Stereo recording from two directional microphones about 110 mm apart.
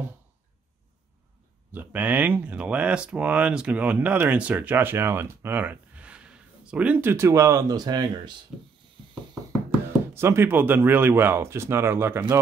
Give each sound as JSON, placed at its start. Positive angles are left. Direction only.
{"t": 1.7, "sound": "speech", "side_deg": -15}
{"t": 8.5, "sound": "ratchet", "side_deg": -5}
{"t": 10.1, "sound": "speech", "side_deg": -25}